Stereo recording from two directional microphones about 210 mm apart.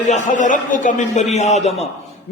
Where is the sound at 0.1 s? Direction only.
35° left (ahead or behind).